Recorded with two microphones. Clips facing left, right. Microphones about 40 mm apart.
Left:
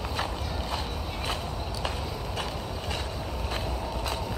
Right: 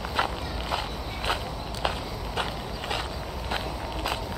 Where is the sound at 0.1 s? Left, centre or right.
Right.